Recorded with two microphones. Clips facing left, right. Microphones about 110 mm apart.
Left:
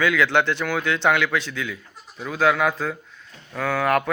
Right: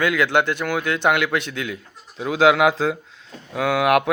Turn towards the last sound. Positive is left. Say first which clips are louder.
# right 3 dB
turn(degrees=-65)  # may be behind; listen again after turning